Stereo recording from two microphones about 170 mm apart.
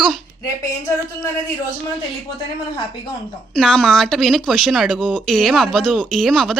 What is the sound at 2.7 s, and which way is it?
Speech, 30° left (ahead or behind).